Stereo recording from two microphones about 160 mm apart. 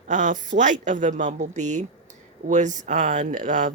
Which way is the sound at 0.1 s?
50° right (ahead or behind).